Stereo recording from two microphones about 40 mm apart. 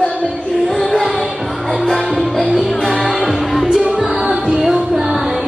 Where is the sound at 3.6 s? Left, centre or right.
Centre.